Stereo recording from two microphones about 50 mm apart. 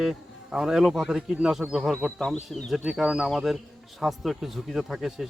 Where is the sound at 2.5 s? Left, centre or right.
Centre.